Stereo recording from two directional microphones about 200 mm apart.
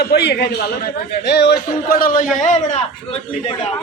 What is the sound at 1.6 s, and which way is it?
A man's voice, 45° left (ahead or behind).